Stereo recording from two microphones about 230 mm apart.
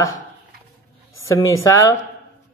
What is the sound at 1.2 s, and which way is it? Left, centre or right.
Speech, centre.